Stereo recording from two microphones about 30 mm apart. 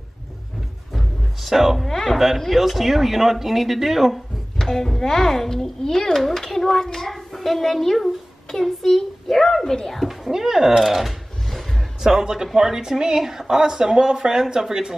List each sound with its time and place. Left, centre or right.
0.9 s music: centre
1.9 s a child's voice: centre
2.1 s speech: centre
4.6 s a child's voice: centre
10.3 s speech: centre